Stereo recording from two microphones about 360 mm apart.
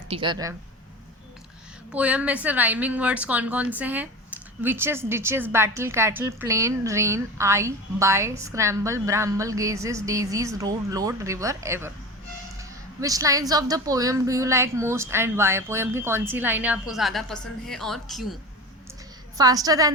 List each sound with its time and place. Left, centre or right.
0.1 s a woman's voice: centre
1.9 s a woman's voice: centre
19.4 s a woman's voice: centre